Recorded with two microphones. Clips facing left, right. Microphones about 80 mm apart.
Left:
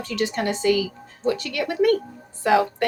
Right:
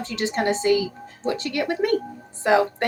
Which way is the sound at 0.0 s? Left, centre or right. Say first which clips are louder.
Right 1 dB; right.